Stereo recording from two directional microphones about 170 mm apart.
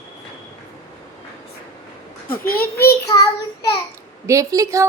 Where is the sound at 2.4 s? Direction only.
60° left (ahead or behind).